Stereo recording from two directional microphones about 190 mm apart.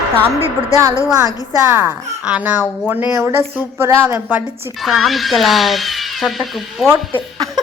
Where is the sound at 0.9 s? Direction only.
15° left (ahead or behind).